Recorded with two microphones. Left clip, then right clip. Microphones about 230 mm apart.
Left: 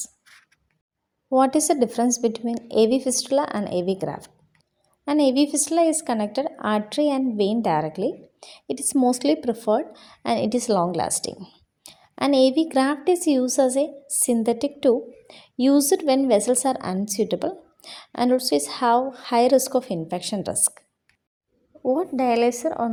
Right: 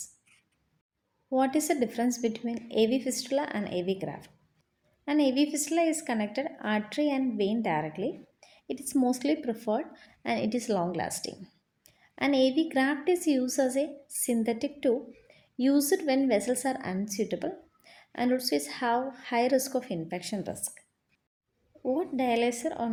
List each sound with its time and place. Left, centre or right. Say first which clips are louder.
1.3 s a woman's voice: left 8 dB; left
21.8 s a woman's voice: left 7 dB; left